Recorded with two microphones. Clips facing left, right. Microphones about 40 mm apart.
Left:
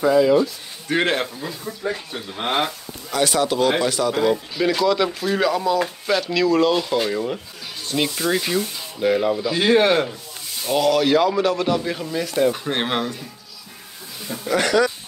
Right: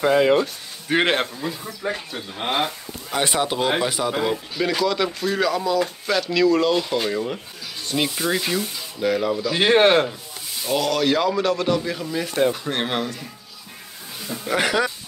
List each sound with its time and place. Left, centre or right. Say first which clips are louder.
0.0 s speech: left 1 dB; right
0.9 s speech: right 1 dB; centre
1.2 s a man's voice: even; centre
2.1 s speech: left 2 dB; centre
3.1 s a man's voice: left 2 dB; right
4.6 s speech: left 1 dB; centre
9.6 s speech: right 1 dB; right
10.6 s speech: left 3 dB; centre
12.5 s speech: left 2 dB; centre
14.4 s a man's voice: left 3 dB; centre